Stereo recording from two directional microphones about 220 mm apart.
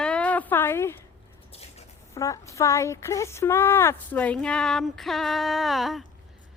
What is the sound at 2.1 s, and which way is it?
Speech, 15° left (ahead or behind).